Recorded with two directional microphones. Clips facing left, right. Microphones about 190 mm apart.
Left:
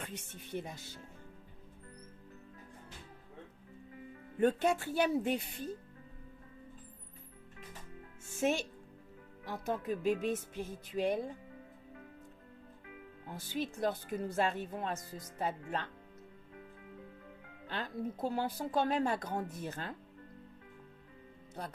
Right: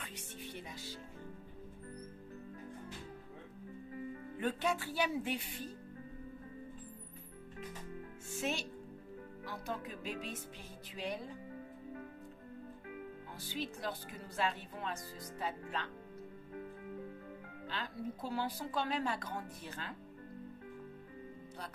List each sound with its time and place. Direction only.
0.5 s a woman's voice: 50° left (ahead or behind)
4.4 s a woman's voice: 45° left (ahead or behind)
8.4 s a woman's voice: 50° left (ahead or behind)
13.3 s a woman's voice: 50° left (ahead or behind)
17.7 s a woman's voice: 50° left (ahead or behind)